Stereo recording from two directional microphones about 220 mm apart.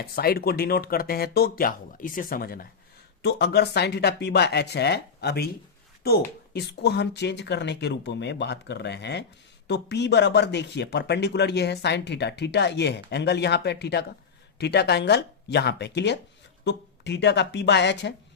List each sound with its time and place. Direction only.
0.0 s speech: 45° left (ahead or behind)